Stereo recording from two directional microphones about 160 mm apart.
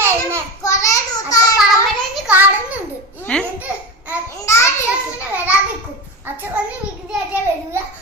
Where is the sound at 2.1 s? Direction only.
5° right (ahead or behind).